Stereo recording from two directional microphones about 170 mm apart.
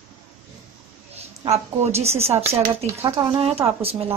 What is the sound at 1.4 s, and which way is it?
Speech, 40° right (ahead or behind).